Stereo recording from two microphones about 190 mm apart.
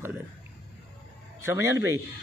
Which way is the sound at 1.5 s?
15° right (ahead or behind).